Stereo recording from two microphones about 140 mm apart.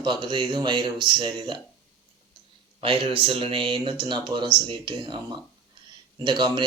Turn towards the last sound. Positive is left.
turn(degrees=-35)  # may be behind; listen again after turning